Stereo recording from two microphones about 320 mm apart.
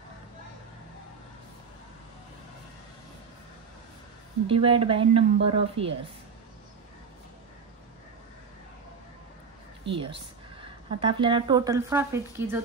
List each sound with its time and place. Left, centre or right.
4.5 s a woman's voice: centre
10.6 s a woman's voice: centre